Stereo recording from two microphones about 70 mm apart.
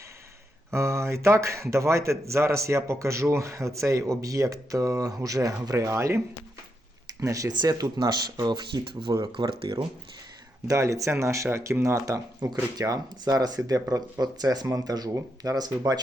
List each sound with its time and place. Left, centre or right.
0.7 s speech: right
5.7 s speech: right
7.5 s speech: right
9.1 s speech: right
10.7 s speech: right
12.4 s speech: right